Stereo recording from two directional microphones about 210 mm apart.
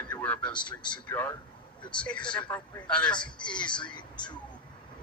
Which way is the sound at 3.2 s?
20° left (ahead or behind).